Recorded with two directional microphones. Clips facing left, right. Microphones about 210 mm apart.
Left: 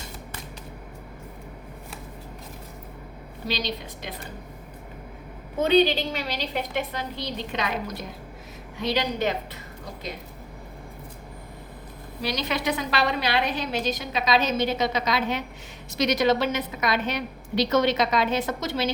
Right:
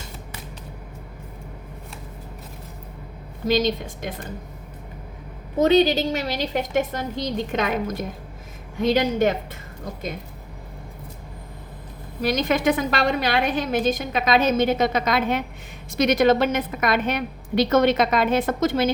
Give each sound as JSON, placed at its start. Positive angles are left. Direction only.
{"t": 3.4, "sound": "a woman's voice", "side_deg": -50}
{"t": 5.5, "sound": "a woman's voice", "side_deg": -40}
{"t": 12.2, "sound": "a woman's voice", "side_deg": -50}